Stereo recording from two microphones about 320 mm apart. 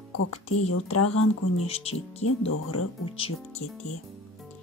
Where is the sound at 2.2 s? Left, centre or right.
Left.